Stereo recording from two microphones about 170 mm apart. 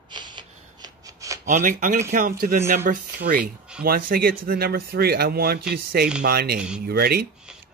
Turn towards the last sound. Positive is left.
turn(degrees=-65)  # may be behind; listen again after turning